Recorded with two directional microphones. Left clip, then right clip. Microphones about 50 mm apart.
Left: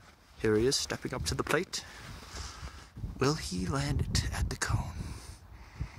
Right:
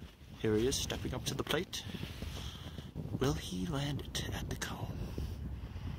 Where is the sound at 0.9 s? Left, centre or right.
Left.